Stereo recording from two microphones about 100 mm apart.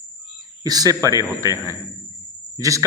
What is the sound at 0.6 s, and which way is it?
A man's voice, 40° right (ahead or behind).